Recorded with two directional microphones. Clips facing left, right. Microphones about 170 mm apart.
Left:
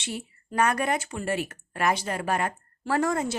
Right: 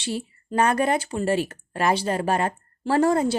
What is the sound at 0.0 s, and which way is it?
Speech, 30° right (ahead or behind).